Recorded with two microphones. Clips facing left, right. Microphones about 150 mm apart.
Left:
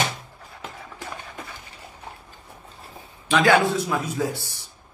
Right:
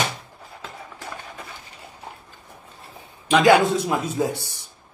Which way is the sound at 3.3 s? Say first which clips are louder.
Right 3 dB; 15° right (ahead or behind).